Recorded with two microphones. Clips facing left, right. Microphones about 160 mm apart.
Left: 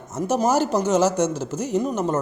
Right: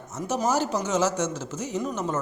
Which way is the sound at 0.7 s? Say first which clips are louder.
Left 5 dB; 40° left (ahead or behind).